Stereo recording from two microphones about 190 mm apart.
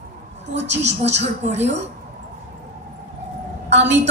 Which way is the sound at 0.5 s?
65° right (ahead or behind).